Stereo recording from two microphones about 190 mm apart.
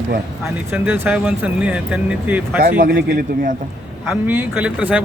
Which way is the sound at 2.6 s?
50° right (ahead or behind).